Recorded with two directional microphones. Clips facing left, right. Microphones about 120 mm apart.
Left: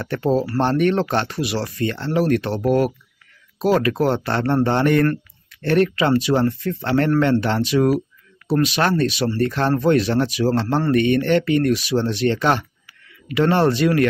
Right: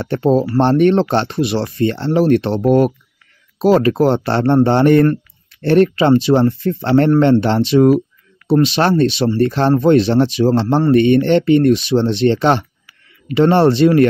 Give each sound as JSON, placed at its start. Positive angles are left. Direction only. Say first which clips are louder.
{"t": 0.0, "sound": "speech", "louder": "right 5 dB", "side_deg": -25}